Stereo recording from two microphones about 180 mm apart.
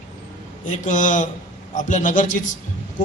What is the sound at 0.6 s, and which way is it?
A man's voice, 45° left (ahead or behind).